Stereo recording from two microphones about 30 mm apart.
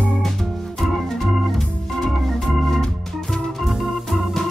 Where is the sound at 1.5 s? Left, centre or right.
Centre.